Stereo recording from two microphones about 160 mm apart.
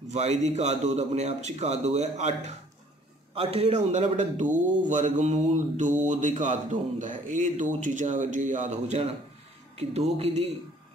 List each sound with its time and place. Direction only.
0.1 s a man's voice: 45° right (ahead or behind)